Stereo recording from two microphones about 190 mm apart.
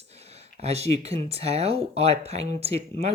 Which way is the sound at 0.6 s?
35° right (ahead or behind).